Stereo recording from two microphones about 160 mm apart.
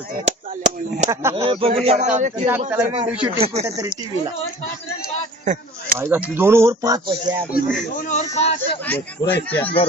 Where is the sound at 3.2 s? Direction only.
40° right (ahead or behind).